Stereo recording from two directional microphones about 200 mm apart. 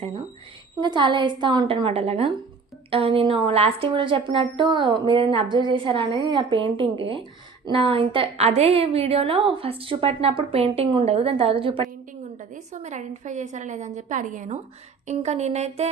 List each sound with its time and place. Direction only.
0.8 s a woman's voice: 25° right (ahead or behind)
12.4 s a woman's voice: 40° right (ahead or behind)
15.0 s a sound: 35° right (ahead or behind)